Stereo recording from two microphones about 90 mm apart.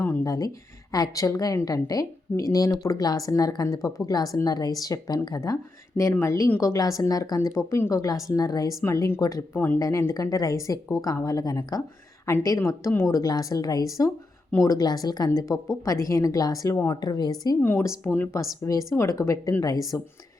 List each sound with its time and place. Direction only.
0.0 s a sound: 25° left (ahead or behind)
0.3 s a woman's voice: 40° left (ahead or behind)
8.8 s a woman's voice: 30° left (ahead or behind)
10.2 s a woman's voice: 45° left (ahead or behind)
13.1 s speech: 45° left (ahead or behind)
15.3 s a woman's voice: 35° left (ahead or behind)
17.0 s speech: 50° left (ahead or behind)
17.6 s speech: 20° left (ahead or behind)
18.6 s a woman's voice: 35° left (ahead or behind)